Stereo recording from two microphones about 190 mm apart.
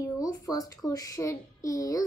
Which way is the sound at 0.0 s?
20° left (ahead or behind).